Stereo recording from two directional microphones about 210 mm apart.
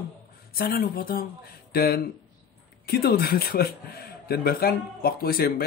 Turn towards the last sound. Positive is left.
turn(degrees=45)  # may be behind; listen again after turning